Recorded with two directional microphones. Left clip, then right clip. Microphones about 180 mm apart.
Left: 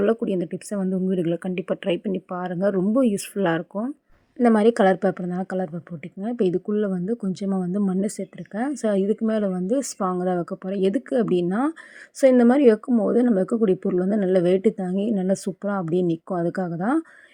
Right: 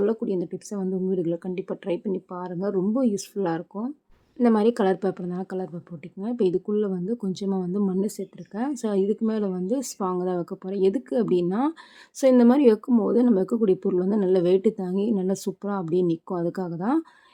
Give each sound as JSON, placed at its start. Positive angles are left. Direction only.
{"t": 0.0, "sound": "a woman's voice", "side_deg": 20}